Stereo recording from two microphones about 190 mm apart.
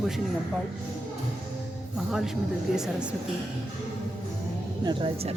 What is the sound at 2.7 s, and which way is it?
Speech, 5° right (ahead or behind).